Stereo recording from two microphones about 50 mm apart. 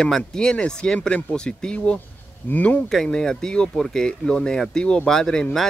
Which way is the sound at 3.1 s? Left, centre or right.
Centre.